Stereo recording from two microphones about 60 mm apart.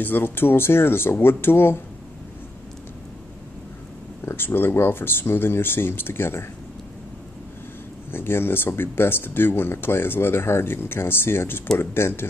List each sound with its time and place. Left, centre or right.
0.0 s speech: left
4.3 s speech: left
8.1 s speech: left